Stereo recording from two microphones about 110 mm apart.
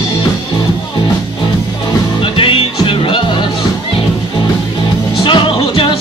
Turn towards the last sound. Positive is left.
turn(degrees=55)  # may be behind; listen again after turning